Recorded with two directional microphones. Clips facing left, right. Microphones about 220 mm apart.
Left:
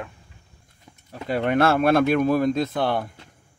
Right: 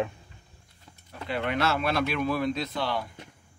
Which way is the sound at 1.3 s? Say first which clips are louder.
Left 7 dB; 45° left (ahead or behind).